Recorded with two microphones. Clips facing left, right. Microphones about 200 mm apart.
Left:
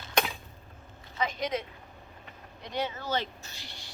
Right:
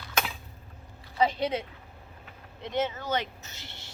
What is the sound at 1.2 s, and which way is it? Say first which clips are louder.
Speech: right 5 dB; 30° right (ahead or behind).